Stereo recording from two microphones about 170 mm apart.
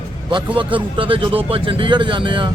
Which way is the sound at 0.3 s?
30° right (ahead or behind).